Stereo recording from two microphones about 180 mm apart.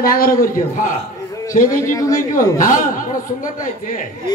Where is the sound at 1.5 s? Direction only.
45° left (ahead or behind).